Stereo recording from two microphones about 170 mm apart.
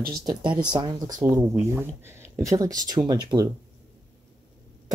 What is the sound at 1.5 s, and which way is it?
Speech, 10° right (ahead or behind).